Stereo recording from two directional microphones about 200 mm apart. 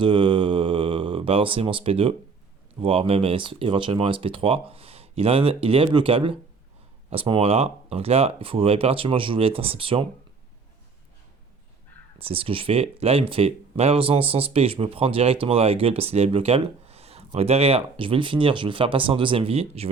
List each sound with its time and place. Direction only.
0.0 s a sound: 25° right (ahead or behind)
2.8 s speech: 30° right (ahead or behind)
12.2 s speech: 30° right (ahead or behind)